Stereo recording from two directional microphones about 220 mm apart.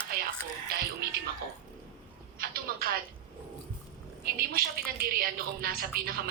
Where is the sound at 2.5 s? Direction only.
45° right (ahead or behind).